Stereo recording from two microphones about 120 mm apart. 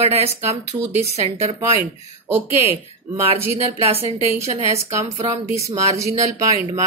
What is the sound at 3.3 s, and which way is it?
Speech, 55° right (ahead or behind).